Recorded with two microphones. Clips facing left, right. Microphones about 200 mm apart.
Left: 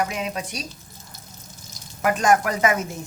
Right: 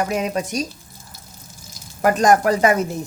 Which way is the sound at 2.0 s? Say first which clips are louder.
Right 4 dB; 40° right (ahead or behind).